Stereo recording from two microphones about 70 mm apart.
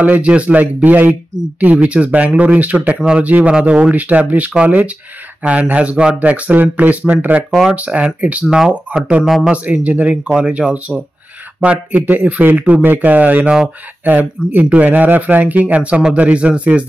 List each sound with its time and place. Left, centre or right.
0.0 s speech: centre